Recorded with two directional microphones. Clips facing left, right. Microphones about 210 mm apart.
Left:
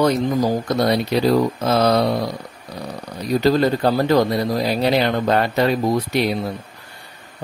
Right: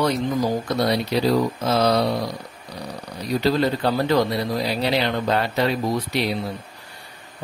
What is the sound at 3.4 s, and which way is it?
Speech, 45° left (ahead or behind).